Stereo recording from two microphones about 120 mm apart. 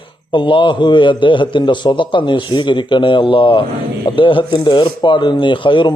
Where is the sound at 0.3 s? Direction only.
45° left (ahead or behind).